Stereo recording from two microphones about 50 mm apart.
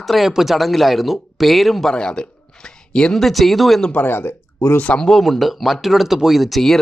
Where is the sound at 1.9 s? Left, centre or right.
Centre.